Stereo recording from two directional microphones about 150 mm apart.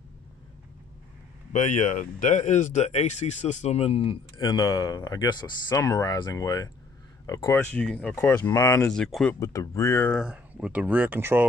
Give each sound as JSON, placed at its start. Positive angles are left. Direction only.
{"t": 1.5, "sound": "speech", "side_deg": 55}
{"t": 4.4, "sound": "speech", "side_deg": 25}
{"t": 8.5, "sound": "speech", "side_deg": 25}
{"t": 8.9, "sound": "speech", "side_deg": 5}
{"t": 9.4, "sound": "speech", "side_deg": 20}
{"t": 10.1, "sound": "speech", "side_deg": -5}